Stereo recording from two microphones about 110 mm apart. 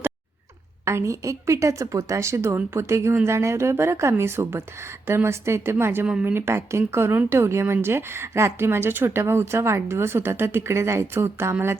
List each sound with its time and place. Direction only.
0.9 s speech: 25° right (ahead or behind)